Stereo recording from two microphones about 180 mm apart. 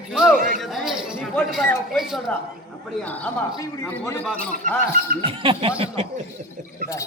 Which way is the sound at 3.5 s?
20° left (ahead or behind).